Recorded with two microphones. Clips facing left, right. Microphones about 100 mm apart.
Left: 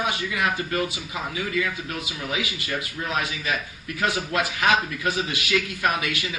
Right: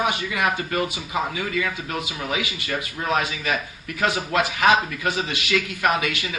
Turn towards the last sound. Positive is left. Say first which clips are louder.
# right 3 dB
turn(degrees=-20)  # may be behind; listen again after turning